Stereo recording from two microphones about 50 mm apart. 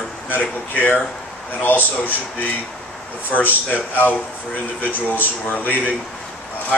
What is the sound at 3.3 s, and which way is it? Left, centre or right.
Speech, left.